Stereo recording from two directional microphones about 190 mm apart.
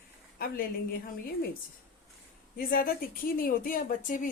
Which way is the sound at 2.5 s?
50° left (ahead or behind).